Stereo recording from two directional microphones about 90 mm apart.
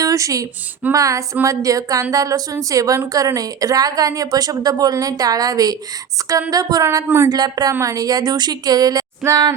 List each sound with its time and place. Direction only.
0.0 s a sound: 40° right (ahead or behind)
0.9 s a woman's voice: 40° right (ahead or behind)
6.8 s speech: 30° right (ahead or behind)
7.3 s speech: 50° right (ahead or behind)
7.7 s a woman's voice: 35° right (ahead or behind)